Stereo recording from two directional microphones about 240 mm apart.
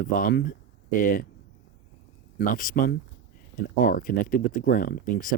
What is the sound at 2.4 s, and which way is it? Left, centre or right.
Speech, left.